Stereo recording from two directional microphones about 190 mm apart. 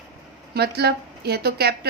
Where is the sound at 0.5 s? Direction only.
60° right (ahead or behind).